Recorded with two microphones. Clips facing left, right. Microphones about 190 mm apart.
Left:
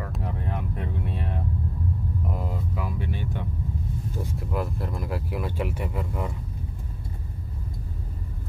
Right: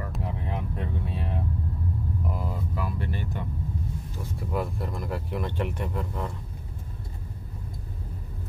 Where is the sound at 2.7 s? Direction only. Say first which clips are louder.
Even; 5° left (ahead or behind).